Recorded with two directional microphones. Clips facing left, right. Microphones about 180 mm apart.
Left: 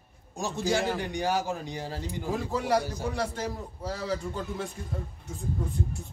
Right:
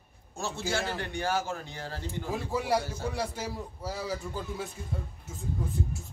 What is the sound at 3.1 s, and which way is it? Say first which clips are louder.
A man's voice: left 2 dB; 10° right (ahead or behind).